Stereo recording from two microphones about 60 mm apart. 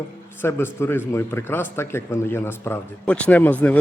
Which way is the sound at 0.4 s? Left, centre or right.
Left.